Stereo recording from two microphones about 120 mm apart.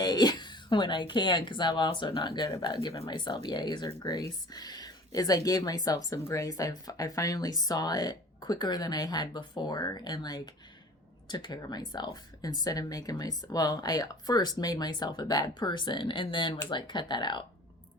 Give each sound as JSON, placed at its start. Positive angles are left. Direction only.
{"t": 0.0, "sound": "speech", "side_deg": 35}